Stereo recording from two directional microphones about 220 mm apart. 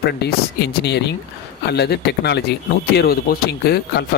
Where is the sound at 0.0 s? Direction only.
50° left (ahead or behind).